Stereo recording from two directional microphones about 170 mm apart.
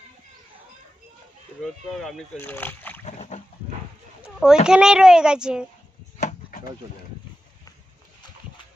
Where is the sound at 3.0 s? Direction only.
40° left (ahead or behind).